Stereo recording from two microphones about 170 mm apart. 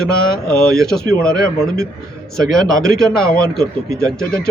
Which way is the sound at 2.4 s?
5° left (ahead or behind).